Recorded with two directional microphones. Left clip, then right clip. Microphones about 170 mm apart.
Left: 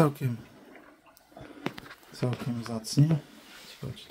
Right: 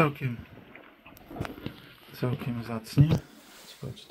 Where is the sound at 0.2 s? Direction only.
40° left (ahead or behind).